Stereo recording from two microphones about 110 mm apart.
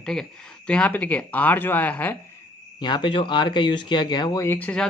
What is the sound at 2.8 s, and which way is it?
Speech, 50° left (ahead or behind).